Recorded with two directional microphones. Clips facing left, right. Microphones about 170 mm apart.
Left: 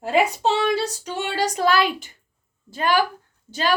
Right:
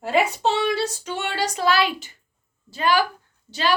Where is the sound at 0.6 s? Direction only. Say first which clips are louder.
Left 1 dB; 40° left (ahead or behind).